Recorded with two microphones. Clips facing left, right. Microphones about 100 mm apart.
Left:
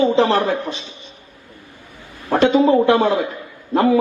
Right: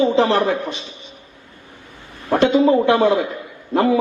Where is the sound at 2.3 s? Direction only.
35° left (ahead or behind).